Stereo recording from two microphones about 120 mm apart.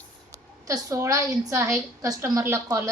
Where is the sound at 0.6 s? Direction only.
30° right (ahead or behind).